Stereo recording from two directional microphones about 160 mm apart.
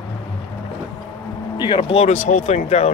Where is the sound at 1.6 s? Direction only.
30° left (ahead or behind).